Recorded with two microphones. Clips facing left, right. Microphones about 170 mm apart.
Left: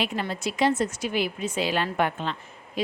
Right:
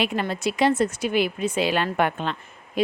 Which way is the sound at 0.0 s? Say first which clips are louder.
Right 4 dB; 60° right (ahead or behind).